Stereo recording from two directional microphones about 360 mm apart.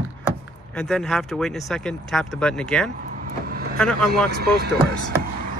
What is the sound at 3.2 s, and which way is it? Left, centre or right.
Vehicle, right.